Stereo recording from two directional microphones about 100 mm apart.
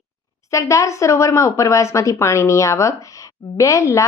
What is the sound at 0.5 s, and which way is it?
Speech, 30° left (ahead or behind).